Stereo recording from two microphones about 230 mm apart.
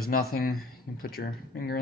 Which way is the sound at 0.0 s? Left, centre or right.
Left.